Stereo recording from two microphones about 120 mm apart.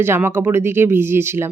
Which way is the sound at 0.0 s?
20° right (ahead or behind).